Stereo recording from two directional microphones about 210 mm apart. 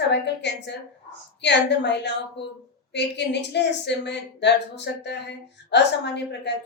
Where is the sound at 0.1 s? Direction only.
55° left (ahead or behind).